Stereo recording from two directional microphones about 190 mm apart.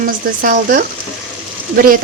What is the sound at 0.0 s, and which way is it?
Speech, 45° right (ahead or behind).